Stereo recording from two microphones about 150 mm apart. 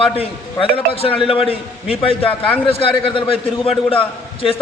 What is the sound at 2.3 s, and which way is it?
Speech, 10° left (ahead or behind).